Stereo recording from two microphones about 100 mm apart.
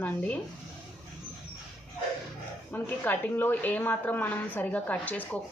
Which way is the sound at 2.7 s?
20° left (ahead or behind).